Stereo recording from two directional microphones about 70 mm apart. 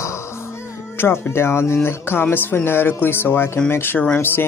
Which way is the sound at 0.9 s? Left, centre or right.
Left.